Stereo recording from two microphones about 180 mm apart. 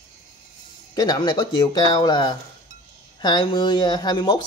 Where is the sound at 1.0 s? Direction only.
20° left (ahead or behind).